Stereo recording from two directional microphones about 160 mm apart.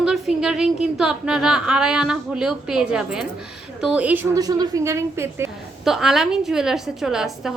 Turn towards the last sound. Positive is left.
turn(degrees=-5)  # may be behind; listen again after turning